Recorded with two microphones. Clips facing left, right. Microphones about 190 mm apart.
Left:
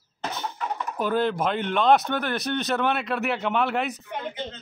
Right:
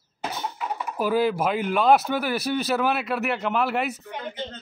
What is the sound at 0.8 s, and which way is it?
Speech, 5° right (ahead or behind).